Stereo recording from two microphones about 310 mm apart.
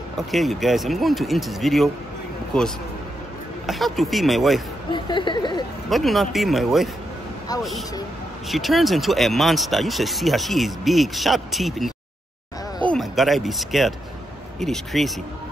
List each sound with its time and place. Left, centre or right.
0.3 s speech: centre
4.9 s speech: centre
5.9 s speech: centre
8.5 s speech: centre